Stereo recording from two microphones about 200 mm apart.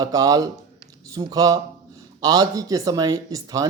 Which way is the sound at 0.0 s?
20° right (ahead or behind).